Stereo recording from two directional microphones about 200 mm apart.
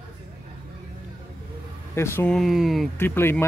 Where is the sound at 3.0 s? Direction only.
10° left (ahead or behind).